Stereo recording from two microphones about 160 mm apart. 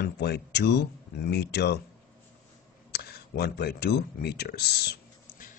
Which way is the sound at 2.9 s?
75° left (ahead or behind).